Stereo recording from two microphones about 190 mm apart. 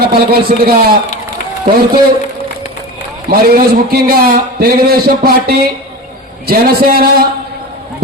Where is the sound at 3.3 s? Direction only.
50° right (ahead or behind).